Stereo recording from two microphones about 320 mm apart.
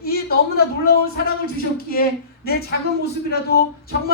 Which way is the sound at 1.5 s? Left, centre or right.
Left.